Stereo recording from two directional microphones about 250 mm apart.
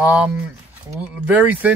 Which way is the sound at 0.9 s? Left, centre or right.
Centre.